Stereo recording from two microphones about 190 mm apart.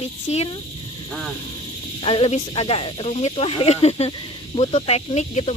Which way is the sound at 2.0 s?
30° left (ahead or behind).